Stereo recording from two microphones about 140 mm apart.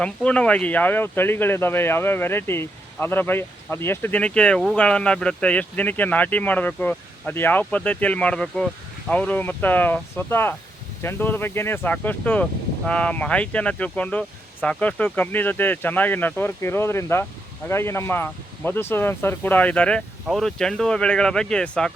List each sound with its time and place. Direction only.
0.0 s speech: 10° left (ahead or behind)